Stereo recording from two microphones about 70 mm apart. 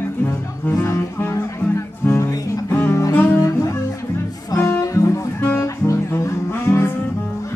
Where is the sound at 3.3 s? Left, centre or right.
Left.